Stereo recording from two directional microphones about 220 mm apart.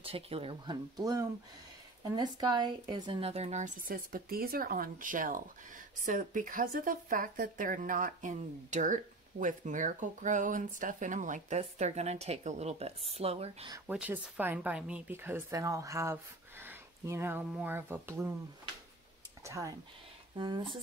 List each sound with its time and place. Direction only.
0.0 s a woman's voice: 25° right (ahead or behind)
13.8 s speech: 5° right (ahead or behind)
19.4 s speech: 15° right (ahead or behind)